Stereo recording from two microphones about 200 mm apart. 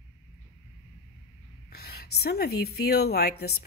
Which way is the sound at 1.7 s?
50° left (ahead or behind).